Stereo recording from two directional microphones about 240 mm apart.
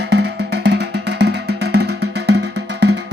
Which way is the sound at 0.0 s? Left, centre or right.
Right.